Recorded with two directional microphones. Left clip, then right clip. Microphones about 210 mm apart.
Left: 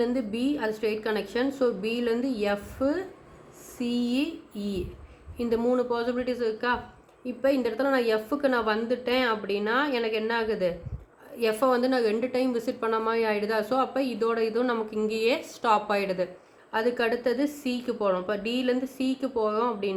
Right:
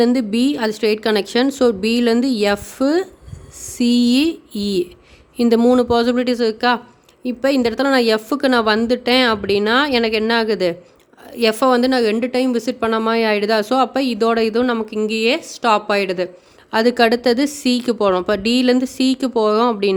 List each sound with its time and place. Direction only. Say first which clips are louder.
0.0 s a woman's voice: right 11 dB; 50° right (ahead or behind)